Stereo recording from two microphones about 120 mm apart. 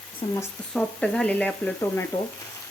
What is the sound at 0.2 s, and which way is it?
Speech, 50° left (ahead or behind).